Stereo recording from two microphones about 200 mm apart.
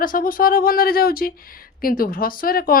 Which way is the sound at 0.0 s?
45° left (ahead or behind).